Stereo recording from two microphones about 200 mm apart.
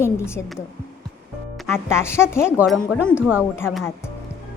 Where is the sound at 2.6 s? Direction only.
5° right (ahead or behind).